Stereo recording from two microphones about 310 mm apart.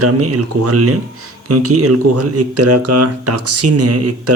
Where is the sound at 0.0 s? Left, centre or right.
Right.